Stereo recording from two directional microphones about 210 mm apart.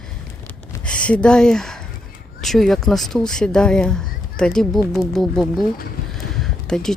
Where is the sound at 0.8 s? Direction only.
5° left (ahead or behind).